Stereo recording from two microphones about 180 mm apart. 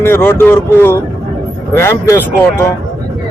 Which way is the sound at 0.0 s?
10° left (ahead or behind).